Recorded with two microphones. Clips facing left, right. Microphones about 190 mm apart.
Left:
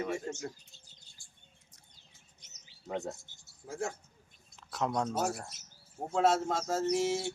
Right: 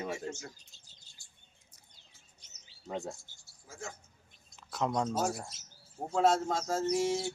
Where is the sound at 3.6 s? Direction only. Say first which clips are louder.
Left 8 dB; 60° left (ahead or behind).